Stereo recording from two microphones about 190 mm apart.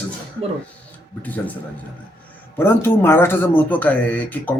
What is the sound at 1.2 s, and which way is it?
Speech, 10° left (ahead or behind).